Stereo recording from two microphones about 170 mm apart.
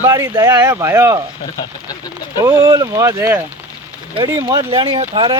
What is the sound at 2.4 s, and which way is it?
Speech, 15° right (ahead or behind).